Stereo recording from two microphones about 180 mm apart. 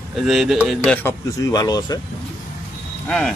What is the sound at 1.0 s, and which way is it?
Speech, 15° left (ahead or behind).